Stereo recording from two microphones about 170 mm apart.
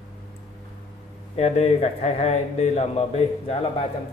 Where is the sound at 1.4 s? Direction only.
40° left (ahead or behind).